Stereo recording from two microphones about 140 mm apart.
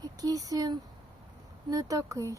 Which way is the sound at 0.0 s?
25° right (ahead or behind).